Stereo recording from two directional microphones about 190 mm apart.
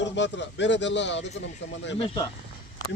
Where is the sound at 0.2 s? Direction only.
70° left (ahead or behind).